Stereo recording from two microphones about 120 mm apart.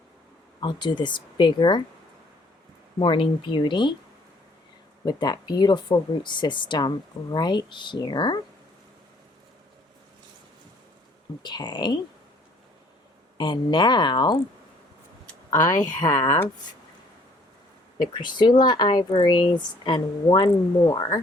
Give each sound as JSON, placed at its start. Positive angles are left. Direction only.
{"t": 0.6, "sound": "speech", "side_deg": 40}
{"t": 3.0, "sound": "speech", "side_deg": 45}
{"t": 5.0, "sound": "speech", "side_deg": 35}
{"t": 11.4, "sound": "speech", "side_deg": 35}
{"t": 13.3, "sound": "speech", "side_deg": 40}
{"t": 15.8, "sound": "speech", "side_deg": 30}
{"t": 18.0, "sound": "speech", "side_deg": 40}